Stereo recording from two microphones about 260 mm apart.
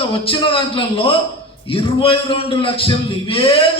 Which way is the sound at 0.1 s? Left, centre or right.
Centre.